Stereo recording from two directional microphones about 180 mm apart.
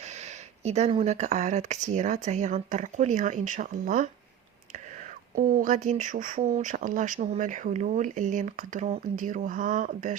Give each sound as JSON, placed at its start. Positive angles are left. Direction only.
{"t": 0.6, "sound": "speech", "side_deg": -40}
{"t": 5.3, "sound": "speech", "side_deg": -50}